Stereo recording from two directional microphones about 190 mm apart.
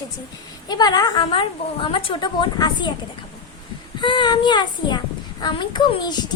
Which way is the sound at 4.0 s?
25° left (ahead or behind).